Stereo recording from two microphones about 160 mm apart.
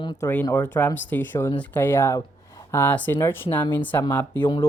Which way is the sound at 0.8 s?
15° left (ahead or behind).